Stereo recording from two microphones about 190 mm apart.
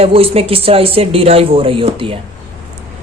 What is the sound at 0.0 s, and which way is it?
Speech, 30° right (ahead or behind).